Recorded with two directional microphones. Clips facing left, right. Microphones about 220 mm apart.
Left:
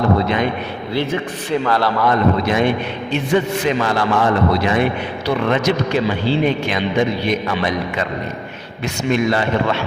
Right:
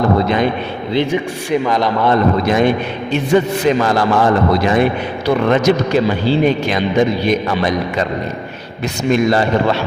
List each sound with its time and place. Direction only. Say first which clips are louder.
0.2 s a man's voice: right 3 dB; 40° right (ahead or behind)
0.9 s speech: right 4 dB; 15° right (ahead or behind)
2.5 s a man's voice: right 3 dB; 40° right (ahead or behind)
9.0 s a man's voice: right 4 dB; 40° right (ahead or behind)